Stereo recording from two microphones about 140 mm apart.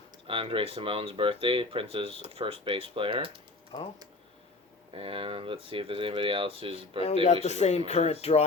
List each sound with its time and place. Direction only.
0.3 s speech: 40° right (ahead or behind)
4.9 s speech: 40° right (ahead or behind)
7.4 s speech: 50° left (ahead or behind)